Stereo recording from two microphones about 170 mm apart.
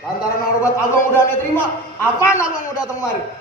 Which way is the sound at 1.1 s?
15° left (ahead or behind).